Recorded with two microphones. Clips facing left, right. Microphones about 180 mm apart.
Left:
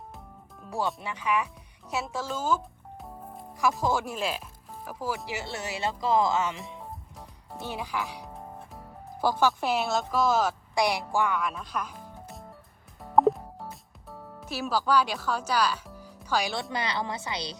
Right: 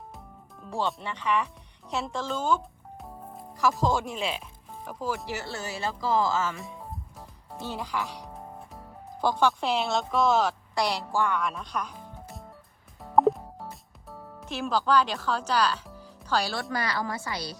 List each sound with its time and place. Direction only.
0.6 s speech: 5° left (ahead or behind)
3.0 s music: centre (ahead or behind)
3.6 s speech: 5° left (ahead or behind)
6.7 s music: centre (ahead or behind)
7.6 s speech: 10° left (ahead or behind)
10.8 s speech: 10° left (ahead or behind)
13.0 s music: centre (ahead or behind); by 16.6 s 15° left (ahead or behind)
16.7 s a woman's voice: 20° left (ahead or behind)